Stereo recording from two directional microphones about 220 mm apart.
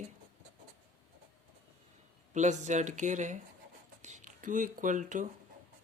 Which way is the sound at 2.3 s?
35° right (ahead or behind).